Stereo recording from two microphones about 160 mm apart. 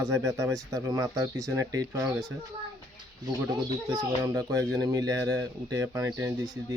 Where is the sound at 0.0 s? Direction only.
20° right (ahead or behind).